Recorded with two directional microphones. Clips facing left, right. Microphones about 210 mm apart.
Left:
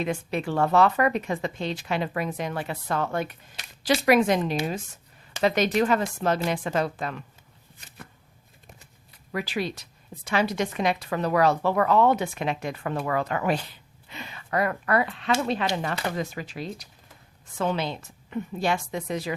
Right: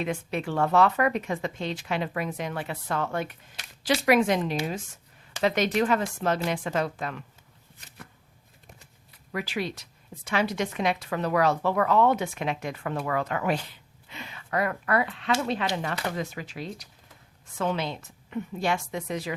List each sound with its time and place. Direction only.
0.0 s a woman's voice: 35° left (ahead or behind)
9.3 s a woman's voice: 35° left (ahead or behind)